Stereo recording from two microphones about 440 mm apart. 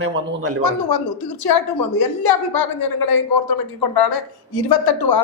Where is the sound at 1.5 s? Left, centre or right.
Left.